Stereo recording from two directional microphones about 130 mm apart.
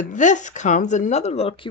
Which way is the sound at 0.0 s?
70° left (ahead or behind).